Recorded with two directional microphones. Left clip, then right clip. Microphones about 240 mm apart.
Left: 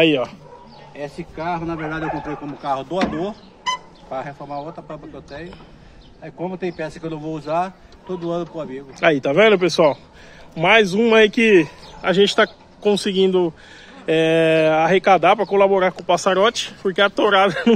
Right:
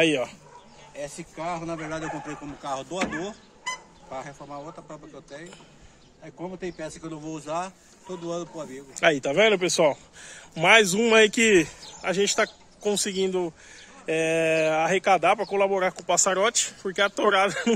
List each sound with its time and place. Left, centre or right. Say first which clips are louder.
0.0 s speech: left 6 dB; centre
0.9 s speech: left 6 dB; right
2.6 s speech: left 8 dB; centre
10.5 s a man's voice: left 3 dB; right
12.0 s speech: left 8 dB; centre